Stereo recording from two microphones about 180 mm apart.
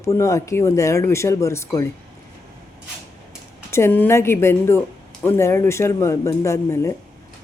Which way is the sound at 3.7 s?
10° left (ahead or behind).